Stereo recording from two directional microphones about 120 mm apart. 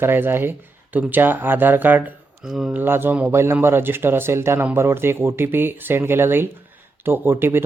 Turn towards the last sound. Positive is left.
turn(degrees=-20)  # may be behind; listen again after turning